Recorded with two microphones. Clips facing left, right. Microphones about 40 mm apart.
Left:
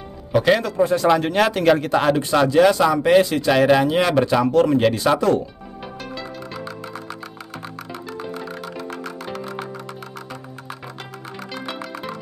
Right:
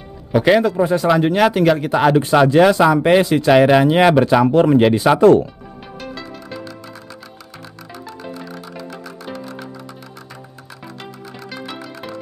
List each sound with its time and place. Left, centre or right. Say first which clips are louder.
0.4 s speech: right 3 dB; centre
1.0 s speech: right 4 dB; centre
2.2 s speech: right 2 dB; right
8.9 s music: left 1 dB; left